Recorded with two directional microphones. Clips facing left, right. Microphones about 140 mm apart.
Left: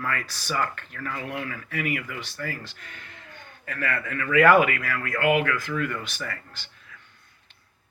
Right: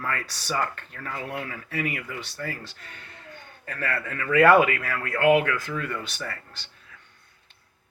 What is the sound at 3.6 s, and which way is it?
Speech, 35° right (ahead or behind).